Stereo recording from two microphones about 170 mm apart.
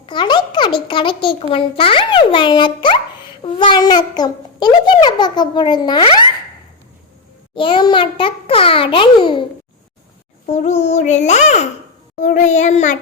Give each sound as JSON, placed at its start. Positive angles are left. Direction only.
{"t": 0.0, "sound": "a child's voice", "side_deg": 30}
{"t": 7.5, "sound": "a child's voice", "side_deg": 30}
{"t": 10.4, "sound": "a child's voice", "side_deg": 45}